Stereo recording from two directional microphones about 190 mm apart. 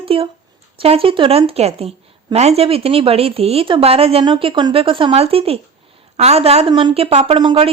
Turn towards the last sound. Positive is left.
turn(degrees=-25)  # may be behind; listen again after turning